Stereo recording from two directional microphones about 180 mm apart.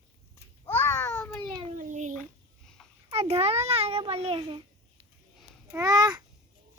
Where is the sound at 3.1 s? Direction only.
35° right (ahead or behind).